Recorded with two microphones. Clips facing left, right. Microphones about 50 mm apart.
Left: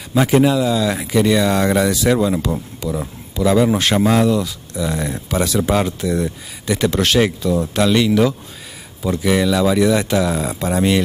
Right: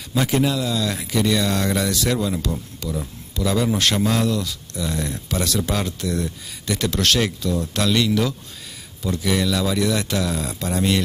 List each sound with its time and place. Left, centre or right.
0.1 s speech: centre